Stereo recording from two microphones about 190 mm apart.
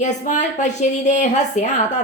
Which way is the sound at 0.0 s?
40° left (ahead or behind).